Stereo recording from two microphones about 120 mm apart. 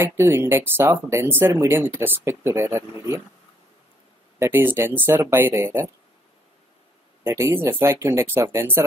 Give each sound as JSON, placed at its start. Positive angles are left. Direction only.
{"t": 0.0, "sound": "speech", "side_deg": -20}
{"t": 4.4, "sound": "speech", "side_deg": -20}
{"t": 7.2, "sound": "speech", "side_deg": -20}